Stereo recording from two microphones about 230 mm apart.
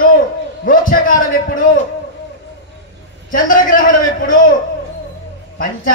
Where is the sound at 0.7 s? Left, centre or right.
Left.